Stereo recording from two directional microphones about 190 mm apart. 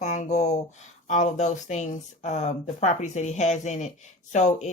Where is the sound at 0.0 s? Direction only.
40° left (ahead or behind).